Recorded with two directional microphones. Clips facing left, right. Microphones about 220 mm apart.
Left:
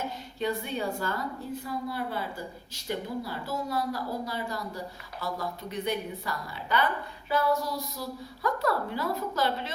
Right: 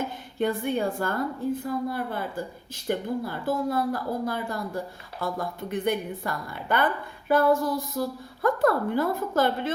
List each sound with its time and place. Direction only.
0.3 s a woman's voice: 50° right (ahead or behind)